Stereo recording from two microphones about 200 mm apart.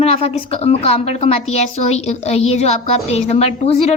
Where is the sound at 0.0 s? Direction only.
30° left (ahead or behind).